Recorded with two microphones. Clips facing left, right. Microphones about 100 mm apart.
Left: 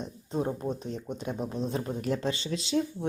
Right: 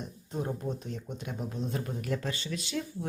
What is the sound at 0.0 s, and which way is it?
Speech, 20° left (ahead or behind).